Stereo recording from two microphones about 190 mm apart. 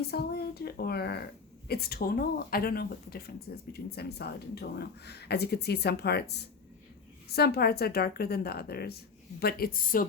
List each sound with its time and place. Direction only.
0.0 s a woman's voice: 55° left (ahead or behind)